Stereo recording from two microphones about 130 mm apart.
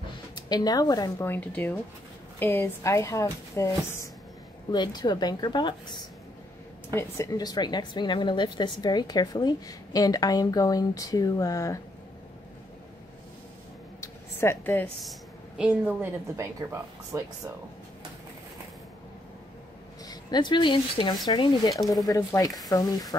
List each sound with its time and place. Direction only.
0.5 s a woman's voice: 30° left (ahead or behind)
1.2 s a woman's voice: 15° left (ahead or behind)
4.6 s a woman's voice: 35° left (ahead or behind)
6.9 s a woman's voice: 20° left (ahead or behind)
14.0 s a sound: 20° left (ahead or behind)
15.0 s a woman's voice: centre (ahead or behind); by 17.3 s 25° right (ahead or behind)
20.1 s a woman's voice: 35° left (ahead or behind)